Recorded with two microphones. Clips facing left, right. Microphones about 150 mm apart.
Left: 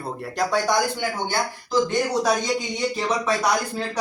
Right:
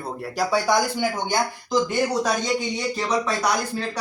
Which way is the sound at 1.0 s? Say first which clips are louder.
Right 2 dB; 15° right (ahead or behind).